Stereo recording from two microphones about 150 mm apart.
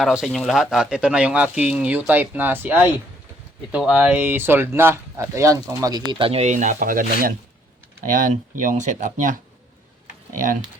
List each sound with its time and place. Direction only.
0.0 s speech: centre (ahead or behind); by 7.3 s 65° right (ahead or behind)
8.3 s speech: 55° right (ahead or behind)